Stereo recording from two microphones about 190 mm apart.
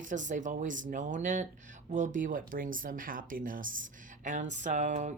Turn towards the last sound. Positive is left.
turn(degrees=-40)  # may be behind; listen again after turning